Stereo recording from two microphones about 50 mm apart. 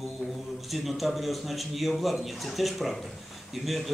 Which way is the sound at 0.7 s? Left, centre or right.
Centre.